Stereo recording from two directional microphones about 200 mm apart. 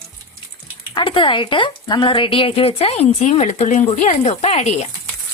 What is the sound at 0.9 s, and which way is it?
Speech, 25° left (ahead or behind).